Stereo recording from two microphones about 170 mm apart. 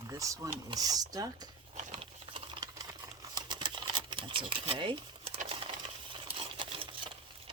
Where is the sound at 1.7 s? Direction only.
45° right (ahead or behind).